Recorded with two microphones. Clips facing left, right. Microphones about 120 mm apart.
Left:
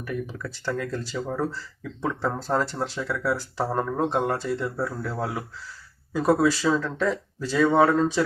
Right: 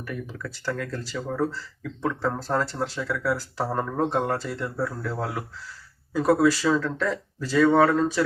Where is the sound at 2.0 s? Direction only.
15° left (ahead or behind).